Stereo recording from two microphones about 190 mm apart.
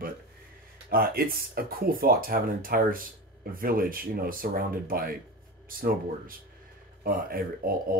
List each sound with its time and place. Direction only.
0.8 s speech: 50° right (ahead or behind)